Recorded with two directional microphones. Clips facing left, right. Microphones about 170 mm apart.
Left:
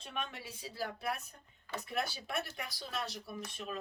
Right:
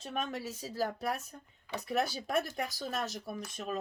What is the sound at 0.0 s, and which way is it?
Speech, 40° right (ahead or behind).